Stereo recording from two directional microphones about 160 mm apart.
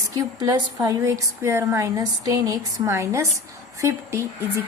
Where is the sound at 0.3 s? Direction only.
25° right (ahead or behind).